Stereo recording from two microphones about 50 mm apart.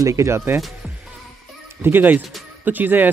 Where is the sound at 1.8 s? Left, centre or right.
Right.